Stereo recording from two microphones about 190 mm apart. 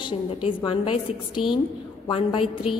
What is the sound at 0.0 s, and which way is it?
A woman's voice, 25° left (ahead or behind).